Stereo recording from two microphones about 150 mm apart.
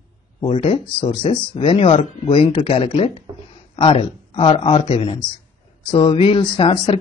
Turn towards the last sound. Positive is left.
turn(degrees=35)  # may be behind; listen again after turning